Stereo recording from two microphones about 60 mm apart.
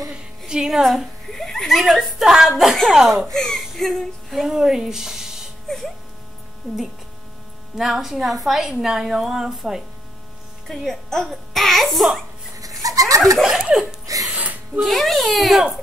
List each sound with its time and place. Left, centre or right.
0.5 s a woman's voice: centre
1.3 s a sound: centre
1.8 s a child's voice: centre
3.3 s speech: centre
7.7 s a child's voice: centre
10.7 s a child's voice: centre
12.5 s goat: right
13.4 s a woman's voice: centre
14.3 s music: right
14.8 s a child's voice: centre